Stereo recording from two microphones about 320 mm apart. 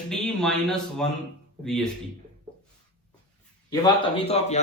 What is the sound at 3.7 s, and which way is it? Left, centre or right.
Speech, centre.